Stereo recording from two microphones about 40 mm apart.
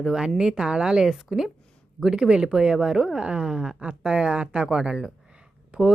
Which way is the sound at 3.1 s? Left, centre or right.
Right.